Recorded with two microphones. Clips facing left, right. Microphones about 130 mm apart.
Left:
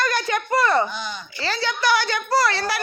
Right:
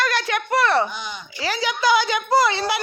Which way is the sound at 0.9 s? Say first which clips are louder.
Left 1 dB; 15° right (ahead or behind).